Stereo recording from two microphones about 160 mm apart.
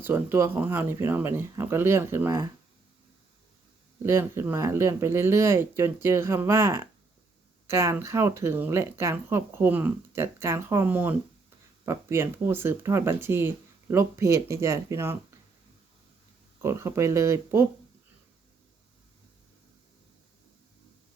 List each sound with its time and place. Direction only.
0.0 s speech: 15° right (ahead or behind)
4.0 s speech: 15° right (ahead or behind)
16.6 s speech: 15° right (ahead or behind)